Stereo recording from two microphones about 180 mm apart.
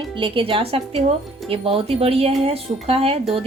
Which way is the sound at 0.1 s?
30° right (ahead or behind).